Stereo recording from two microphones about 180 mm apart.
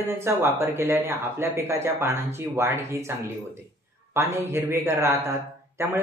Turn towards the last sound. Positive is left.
turn(degrees=-15)  # may be behind; listen again after turning